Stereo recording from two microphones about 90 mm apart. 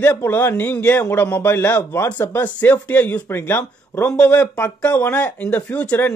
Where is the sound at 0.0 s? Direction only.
25° left (ahead or behind).